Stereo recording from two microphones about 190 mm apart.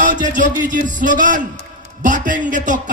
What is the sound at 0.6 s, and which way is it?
A man's voice, 40° right (ahead or behind).